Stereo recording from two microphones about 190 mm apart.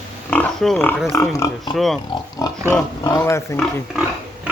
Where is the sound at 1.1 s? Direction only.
15° left (ahead or behind).